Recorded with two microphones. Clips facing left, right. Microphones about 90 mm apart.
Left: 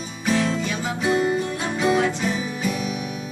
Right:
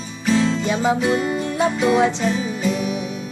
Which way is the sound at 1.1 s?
30° left (ahead or behind).